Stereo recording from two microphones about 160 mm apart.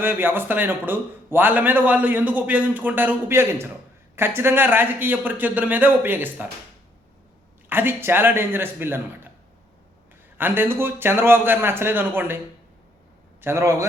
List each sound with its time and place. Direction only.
0.0 s a man's voice: 15° right (ahead or behind)
7.7 s a man's voice: 15° right (ahead or behind)
10.3 s a man's voice: 10° right (ahead or behind)
13.4 s a man's voice: 15° right (ahead or behind)